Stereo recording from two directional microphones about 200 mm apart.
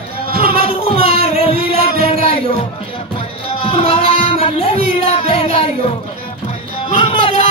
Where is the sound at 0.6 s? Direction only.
30° left (ahead or behind).